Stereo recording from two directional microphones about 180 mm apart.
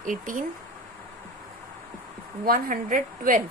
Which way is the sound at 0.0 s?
45° right (ahead or behind).